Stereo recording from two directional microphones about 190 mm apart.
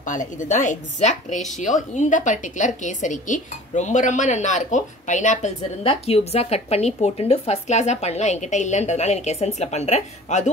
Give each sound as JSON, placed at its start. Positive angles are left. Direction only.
{"t": 0.0, "sound": "a woman's voice", "side_deg": 40}